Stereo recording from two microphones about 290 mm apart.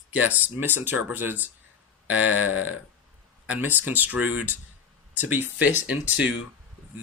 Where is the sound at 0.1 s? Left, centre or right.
Centre.